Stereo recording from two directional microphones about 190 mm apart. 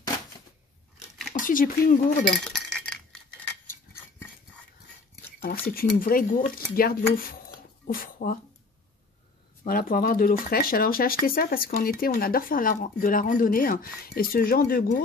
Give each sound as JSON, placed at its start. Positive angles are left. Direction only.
{"t": 1.4, "sound": "speech", "side_deg": 45}
{"t": 2.3, "sound": "a sound", "side_deg": 5}
{"t": 5.7, "sound": "speech", "side_deg": 50}
{"t": 9.7, "sound": "speech", "side_deg": 50}